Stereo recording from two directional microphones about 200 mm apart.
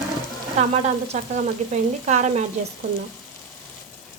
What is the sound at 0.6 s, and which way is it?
Frying, 35° right (ahead or behind).